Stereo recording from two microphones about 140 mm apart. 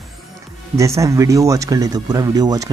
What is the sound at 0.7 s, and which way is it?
Speech, 20° right (ahead or behind).